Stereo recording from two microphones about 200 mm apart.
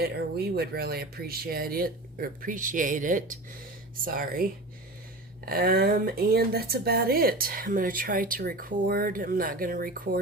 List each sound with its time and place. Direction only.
0.0 s speech: 50° right (ahead or behind)
5.5 s speech: 50° right (ahead or behind)